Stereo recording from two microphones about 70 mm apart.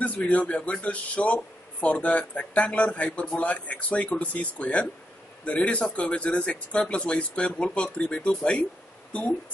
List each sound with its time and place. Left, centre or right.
0.0 s a man's voice: centre